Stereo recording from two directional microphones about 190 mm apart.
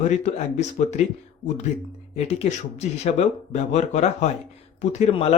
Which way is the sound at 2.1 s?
35° left (ahead or behind).